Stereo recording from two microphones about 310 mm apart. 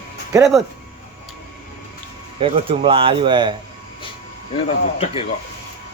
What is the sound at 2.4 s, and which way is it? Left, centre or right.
Speech, centre.